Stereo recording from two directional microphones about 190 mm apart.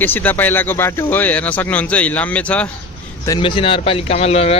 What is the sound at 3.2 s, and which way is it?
Speech, 25° left (ahead or behind).